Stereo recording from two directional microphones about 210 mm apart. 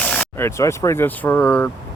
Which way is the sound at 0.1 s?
10° left (ahead or behind).